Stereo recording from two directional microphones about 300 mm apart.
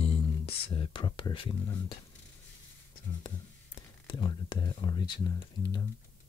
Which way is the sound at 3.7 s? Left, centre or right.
Centre.